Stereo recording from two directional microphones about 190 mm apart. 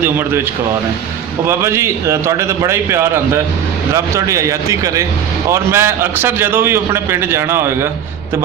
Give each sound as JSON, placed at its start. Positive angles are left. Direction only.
{"t": 1.5, "sound": "a man's voice", "side_deg": -15}